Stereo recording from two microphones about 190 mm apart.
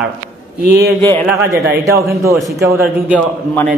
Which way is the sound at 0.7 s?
55° right (ahead or behind).